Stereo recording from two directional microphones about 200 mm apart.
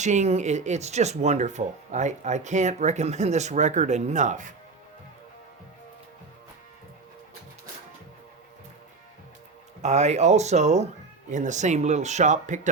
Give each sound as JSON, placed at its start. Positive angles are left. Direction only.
{"t": 0.0, "sound": "speech", "side_deg": -35}
{"t": 9.8, "sound": "speech", "side_deg": -35}